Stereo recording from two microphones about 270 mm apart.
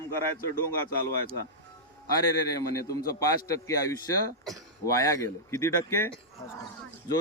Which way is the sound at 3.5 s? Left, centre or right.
Centre.